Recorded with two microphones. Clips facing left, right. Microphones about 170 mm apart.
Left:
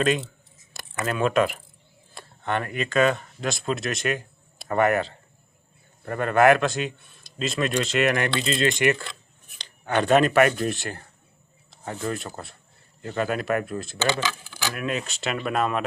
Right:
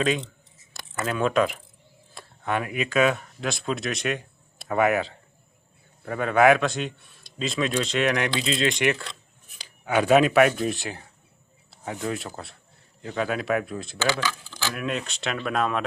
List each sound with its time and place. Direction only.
0.0 s speech: centre (ahead or behind)
14.0 s speech: 20° left (ahead or behind)
14.5 s speech: 5° left (ahead or behind)